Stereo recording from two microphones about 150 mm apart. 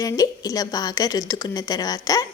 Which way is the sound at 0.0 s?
25° left (ahead or behind).